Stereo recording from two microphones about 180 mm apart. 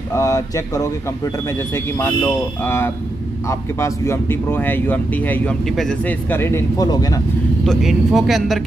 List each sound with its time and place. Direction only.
0.1 s speech: 20° left (ahead or behind)
7.6 s speech: centre (ahead or behind)